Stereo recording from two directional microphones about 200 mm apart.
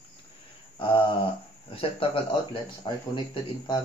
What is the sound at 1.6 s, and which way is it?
Speech, 25° left (ahead or behind).